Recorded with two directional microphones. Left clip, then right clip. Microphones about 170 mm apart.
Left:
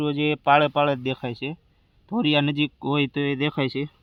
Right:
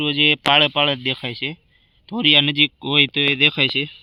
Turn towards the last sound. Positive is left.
turn(degrees=5)  # may be behind; listen again after turning